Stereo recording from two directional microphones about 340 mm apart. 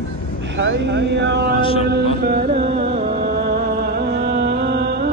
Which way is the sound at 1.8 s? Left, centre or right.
Right.